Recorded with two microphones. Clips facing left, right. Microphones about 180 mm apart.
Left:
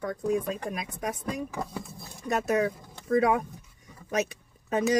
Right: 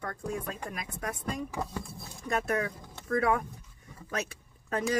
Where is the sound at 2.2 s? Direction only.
20° left (ahead or behind).